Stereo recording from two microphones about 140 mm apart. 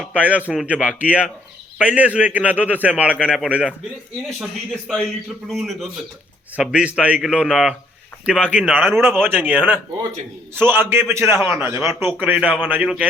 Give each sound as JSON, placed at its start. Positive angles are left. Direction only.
{"t": 0.0, "sound": "a man's voice", "side_deg": -10}
{"t": 4.7, "sound": "a man's voice", "side_deg": 5}